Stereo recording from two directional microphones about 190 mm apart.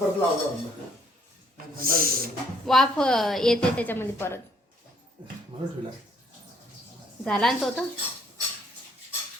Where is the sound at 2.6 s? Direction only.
Centre (ahead or behind).